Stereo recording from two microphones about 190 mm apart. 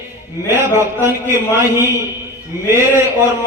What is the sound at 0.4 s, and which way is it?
Speech, 10° right (ahead or behind).